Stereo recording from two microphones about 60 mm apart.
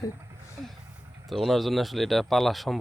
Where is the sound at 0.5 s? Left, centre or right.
Centre.